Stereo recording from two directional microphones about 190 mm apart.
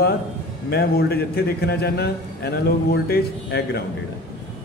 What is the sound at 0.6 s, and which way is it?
A man's voice, 55° left (ahead or behind).